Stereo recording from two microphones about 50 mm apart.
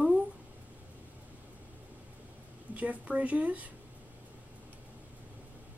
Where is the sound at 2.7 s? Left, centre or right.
Right.